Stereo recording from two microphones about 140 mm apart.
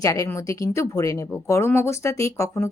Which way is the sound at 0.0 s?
25° left (ahead or behind).